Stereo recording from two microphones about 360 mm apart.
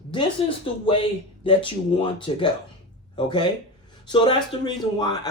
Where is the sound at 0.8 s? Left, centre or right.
Centre.